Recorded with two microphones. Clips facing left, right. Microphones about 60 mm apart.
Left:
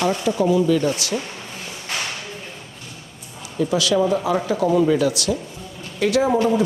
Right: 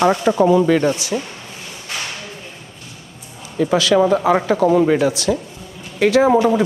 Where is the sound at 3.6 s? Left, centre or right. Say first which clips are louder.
Right 3 dB; right.